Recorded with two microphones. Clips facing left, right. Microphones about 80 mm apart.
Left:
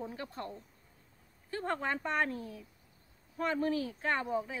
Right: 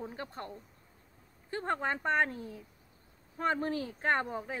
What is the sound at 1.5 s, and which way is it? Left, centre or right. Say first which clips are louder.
A woman's voice: right 1 dB; right.